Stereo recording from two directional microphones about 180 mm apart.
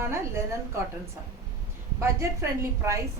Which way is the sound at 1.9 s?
15° right (ahead or behind).